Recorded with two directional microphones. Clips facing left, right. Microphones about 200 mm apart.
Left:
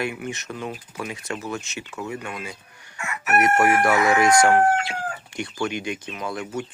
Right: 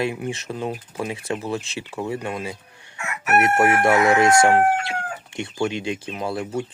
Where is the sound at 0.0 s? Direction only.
30° right (ahead or behind).